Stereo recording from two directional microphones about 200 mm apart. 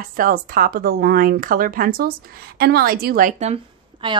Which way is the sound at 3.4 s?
30° right (ahead or behind).